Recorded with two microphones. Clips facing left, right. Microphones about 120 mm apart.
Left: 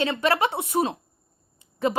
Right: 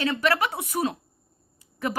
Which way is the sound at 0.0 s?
25° left (ahead or behind).